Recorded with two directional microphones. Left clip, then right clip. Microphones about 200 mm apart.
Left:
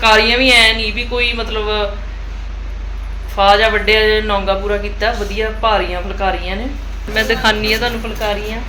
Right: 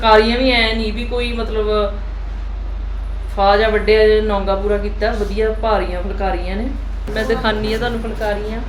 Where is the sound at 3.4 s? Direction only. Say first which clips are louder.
Left 3 dB; 5° right (ahead or behind).